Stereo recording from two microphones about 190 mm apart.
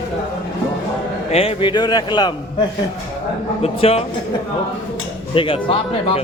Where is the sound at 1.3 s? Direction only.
30° left (ahead or behind).